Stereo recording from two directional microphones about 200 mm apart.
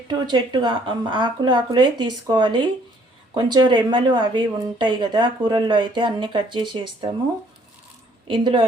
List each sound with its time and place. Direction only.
0.1 s speech: 20° right (ahead or behind)
8.3 s speech: 25° right (ahead or behind)